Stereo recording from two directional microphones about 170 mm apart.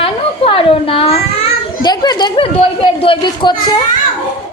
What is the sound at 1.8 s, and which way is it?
Speech, 25° left (ahead or behind).